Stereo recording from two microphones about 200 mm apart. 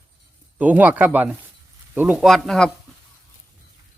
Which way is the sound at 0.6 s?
10° right (ahead or behind).